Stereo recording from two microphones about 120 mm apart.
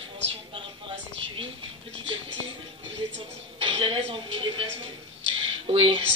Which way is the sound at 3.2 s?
45° right (ahead or behind).